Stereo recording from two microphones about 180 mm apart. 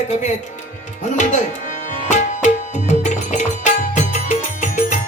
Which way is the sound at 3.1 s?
45° left (ahead or behind).